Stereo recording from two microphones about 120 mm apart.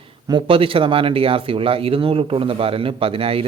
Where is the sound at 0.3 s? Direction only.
45° right (ahead or behind).